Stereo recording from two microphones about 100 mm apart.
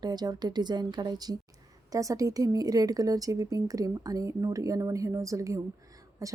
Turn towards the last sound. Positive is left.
turn(degrees=-35)  # may be behind; listen again after turning